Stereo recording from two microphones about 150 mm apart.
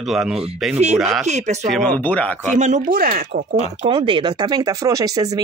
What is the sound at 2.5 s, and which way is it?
Speech, 55° right (ahead or behind).